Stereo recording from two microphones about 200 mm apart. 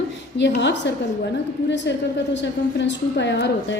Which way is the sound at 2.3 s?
60° left (ahead or behind).